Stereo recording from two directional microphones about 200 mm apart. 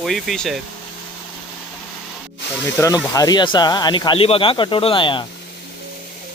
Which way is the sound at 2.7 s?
15° left (ahead or behind).